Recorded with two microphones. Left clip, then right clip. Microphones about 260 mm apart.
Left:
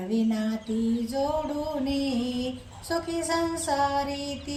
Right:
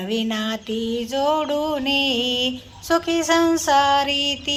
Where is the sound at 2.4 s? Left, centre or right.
Right.